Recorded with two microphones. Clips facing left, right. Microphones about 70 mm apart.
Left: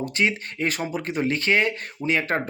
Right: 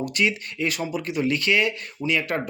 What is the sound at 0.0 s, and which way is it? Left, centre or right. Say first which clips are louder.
Speech: even; left.